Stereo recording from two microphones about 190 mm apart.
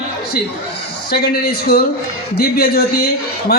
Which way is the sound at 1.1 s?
55° left (ahead or behind).